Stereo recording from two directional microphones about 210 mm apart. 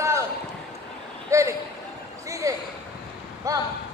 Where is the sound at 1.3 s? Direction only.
15° right (ahead or behind).